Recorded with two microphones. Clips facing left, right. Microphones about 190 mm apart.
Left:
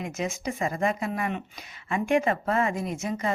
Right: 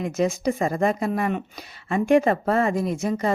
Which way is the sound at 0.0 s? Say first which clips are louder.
Right 8 dB; 35° right (ahead or behind).